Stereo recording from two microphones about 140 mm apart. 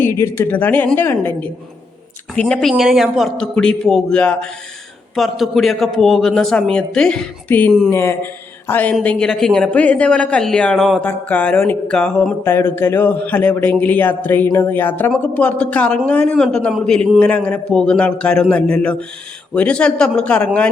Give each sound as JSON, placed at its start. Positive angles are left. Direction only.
{"t": 0.0, "sound": "a man's voice", "side_deg": 20}
{"t": 11.0, "sound": "a man's voice", "side_deg": 10}
{"t": 12.5, "sound": "a man's voice", "side_deg": 15}